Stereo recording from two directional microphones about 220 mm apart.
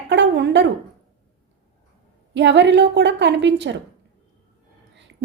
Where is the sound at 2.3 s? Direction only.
55° right (ahead or behind).